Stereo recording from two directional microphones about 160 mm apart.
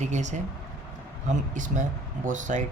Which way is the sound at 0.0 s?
45° right (ahead or behind).